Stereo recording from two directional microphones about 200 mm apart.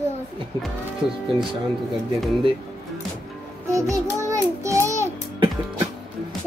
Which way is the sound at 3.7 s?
15° right (ahead or behind).